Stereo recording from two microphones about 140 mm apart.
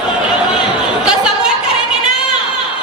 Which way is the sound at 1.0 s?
5° right (ahead or behind).